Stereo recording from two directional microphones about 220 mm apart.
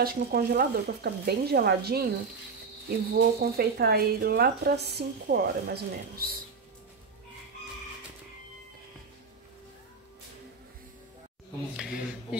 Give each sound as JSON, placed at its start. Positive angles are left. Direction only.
{"t": 0.0, "sound": "speech", "side_deg": -45}
{"t": 3.2, "sound": "speech", "side_deg": -45}
{"t": 11.7, "sound": "speech", "side_deg": -5}